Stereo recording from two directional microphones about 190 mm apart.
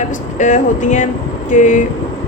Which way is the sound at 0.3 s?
40° left (ahead or behind).